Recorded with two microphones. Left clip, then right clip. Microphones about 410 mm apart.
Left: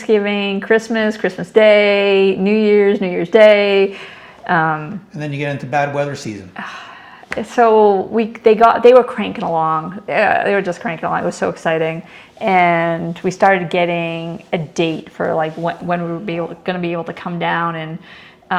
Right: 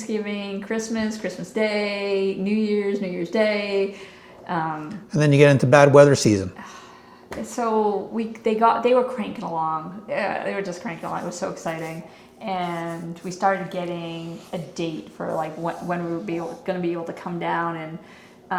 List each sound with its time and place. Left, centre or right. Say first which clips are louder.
0.1 s speech: left 13 dB; left
5.1 s a man's voice: right 8 dB; right
6.6 s speech: left 11 dB; left
12.4 s speech: left 14 dB; left